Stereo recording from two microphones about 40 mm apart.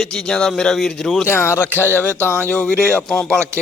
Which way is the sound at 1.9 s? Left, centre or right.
Left.